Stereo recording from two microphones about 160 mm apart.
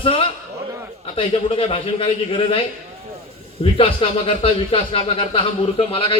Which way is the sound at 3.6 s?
35° left (ahead or behind).